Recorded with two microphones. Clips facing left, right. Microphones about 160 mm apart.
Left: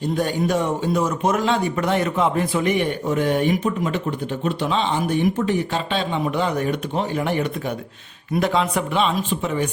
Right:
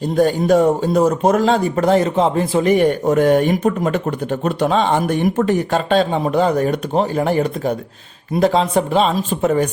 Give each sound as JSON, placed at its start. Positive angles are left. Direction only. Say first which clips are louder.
{"t": 0.2, "sound": "speech", "louder": "right 10 dB", "side_deg": -45}